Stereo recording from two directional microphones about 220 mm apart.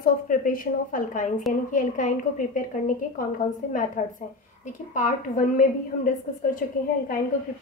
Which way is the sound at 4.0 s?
35° left (ahead or behind).